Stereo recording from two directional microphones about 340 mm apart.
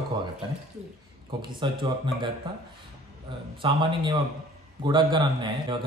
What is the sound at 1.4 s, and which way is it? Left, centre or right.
Speech, centre.